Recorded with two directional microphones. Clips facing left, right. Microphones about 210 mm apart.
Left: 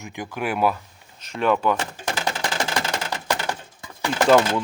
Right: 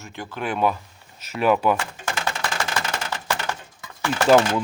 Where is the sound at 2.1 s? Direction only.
20° left (ahead or behind).